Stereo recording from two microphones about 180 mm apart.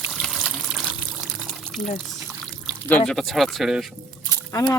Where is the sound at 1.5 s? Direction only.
Centre (ahead or behind).